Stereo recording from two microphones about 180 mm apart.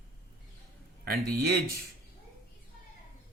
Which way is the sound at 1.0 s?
60° right (ahead or behind).